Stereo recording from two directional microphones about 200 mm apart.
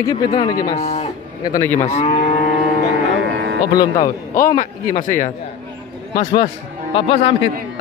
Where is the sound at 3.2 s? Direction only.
60° right (ahead or behind).